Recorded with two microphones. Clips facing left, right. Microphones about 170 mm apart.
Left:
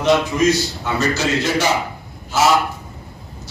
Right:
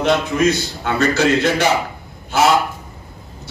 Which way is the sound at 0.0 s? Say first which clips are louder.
Even; 60° right (ahead or behind).